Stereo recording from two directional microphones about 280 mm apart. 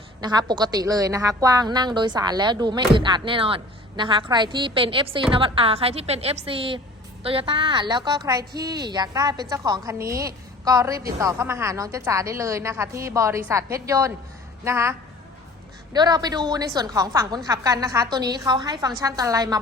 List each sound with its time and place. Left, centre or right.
0.2 s a woman's voice: centre